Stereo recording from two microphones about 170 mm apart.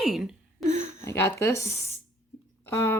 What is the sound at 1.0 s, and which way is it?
Speech, 15° left (ahead or behind).